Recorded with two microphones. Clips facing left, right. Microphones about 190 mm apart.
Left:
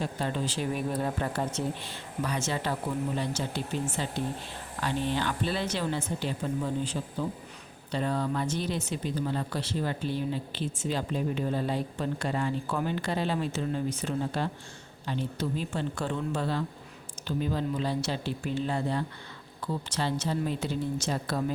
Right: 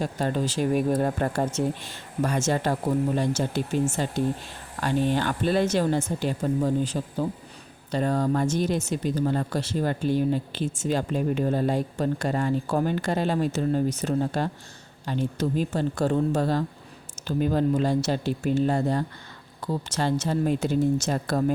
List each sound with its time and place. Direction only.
0.0 s a woman's voice: 45° right (ahead or behind)